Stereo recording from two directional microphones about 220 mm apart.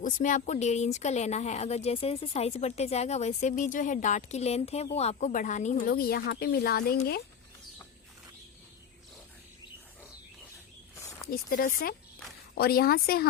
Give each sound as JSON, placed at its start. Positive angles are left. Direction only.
{"t": 0.0, "sound": "speech", "side_deg": 35}
{"t": 11.3, "sound": "speech", "side_deg": 45}